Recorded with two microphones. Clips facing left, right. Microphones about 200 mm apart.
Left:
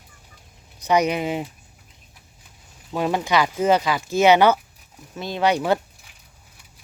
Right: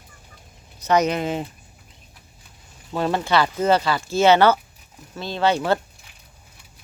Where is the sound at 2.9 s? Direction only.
10° left (ahead or behind).